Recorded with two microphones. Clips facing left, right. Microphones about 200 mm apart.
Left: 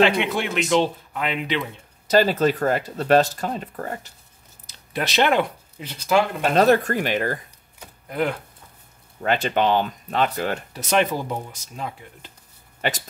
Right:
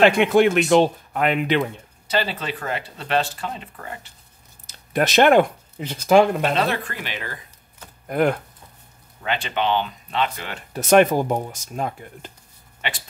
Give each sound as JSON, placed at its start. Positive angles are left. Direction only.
{"t": 0.0, "sound": "speech", "side_deg": -50}
{"t": 2.0, "sound": "speech", "side_deg": 45}
{"t": 4.6, "sound": "speech", "side_deg": -50}
{"t": 6.4, "sound": "speech", "side_deg": 45}
{"t": 8.1, "sound": "speech", "side_deg": -50}
{"t": 9.2, "sound": "speech", "side_deg": 45}
{"t": 10.7, "sound": "speech", "side_deg": -50}
{"t": 12.8, "sound": "speech", "side_deg": 45}